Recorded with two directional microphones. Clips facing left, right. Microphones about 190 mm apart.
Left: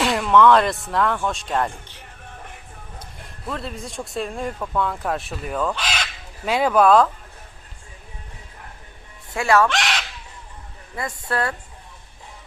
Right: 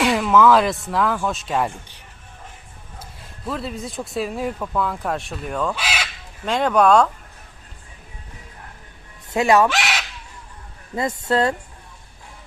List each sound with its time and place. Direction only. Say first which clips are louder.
0.0 s speech: even; centre (ahead or behind)
3.4 s speech: right 3 dB; centre (ahead or behind)
5.7 s crow: right 1 dB; 10° right (ahead or behind)
6.4 s speech: even; 5° left (ahead or behind)
9.3 s a woman's voice: right 2 dB; 20° right (ahead or behind)
9.6 s crow: right 1 dB; 5° right (ahead or behind)
10.9 s a woman's voice: right 6 dB; 25° right (ahead or behind)